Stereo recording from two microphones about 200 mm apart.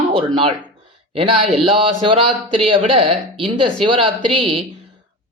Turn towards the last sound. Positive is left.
turn(degrees=-25)  # may be behind; listen again after turning